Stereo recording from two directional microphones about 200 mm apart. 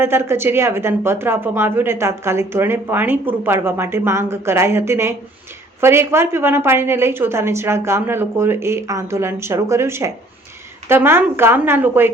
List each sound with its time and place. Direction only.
0.0 s a woman's voice: 10° right (ahead or behind)